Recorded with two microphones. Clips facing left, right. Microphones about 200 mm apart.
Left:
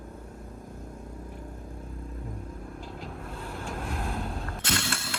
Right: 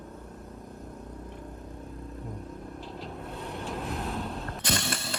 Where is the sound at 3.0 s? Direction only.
Centre (ahead or behind).